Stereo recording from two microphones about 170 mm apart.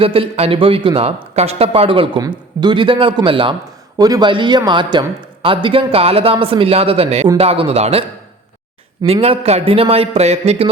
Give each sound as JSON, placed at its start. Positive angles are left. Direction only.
{"t": 0.0, "sound": "a man's voice", "side_deg": -35}
{"t": 9.0, "sound": "a man's voice", "side_deg": -35}